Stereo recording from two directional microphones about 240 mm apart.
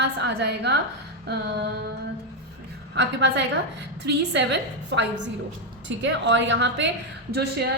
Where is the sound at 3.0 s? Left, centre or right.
Right.